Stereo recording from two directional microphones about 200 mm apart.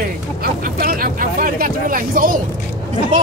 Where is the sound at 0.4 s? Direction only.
45° right (ahead or behind).